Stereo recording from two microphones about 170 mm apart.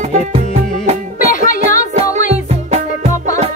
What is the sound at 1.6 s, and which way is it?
Music, 40° right (ahead or behind).